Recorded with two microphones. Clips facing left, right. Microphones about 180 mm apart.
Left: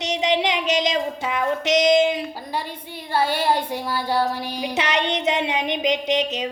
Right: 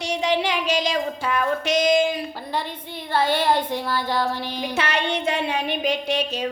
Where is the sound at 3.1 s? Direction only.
10° left (ahead or behind).